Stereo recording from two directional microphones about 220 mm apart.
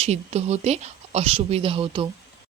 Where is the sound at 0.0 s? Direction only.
30° right (ahead or behind).